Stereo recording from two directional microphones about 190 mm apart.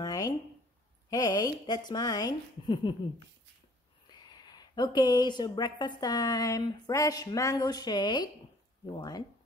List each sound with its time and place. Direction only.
0.0 s a sound: 20° left (ahead or behind)
1.1 s a woman's voice: 20° left (ahead or behind)
4.1 s a woman's voice: 20° left (ahead or behind)